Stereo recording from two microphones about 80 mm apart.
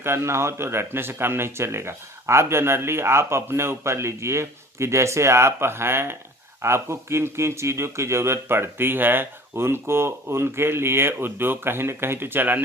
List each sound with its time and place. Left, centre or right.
0.0 s speech: right